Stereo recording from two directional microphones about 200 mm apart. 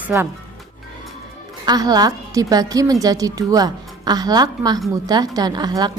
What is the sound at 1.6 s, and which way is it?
A woman's voice, 20° right (ahead or behind).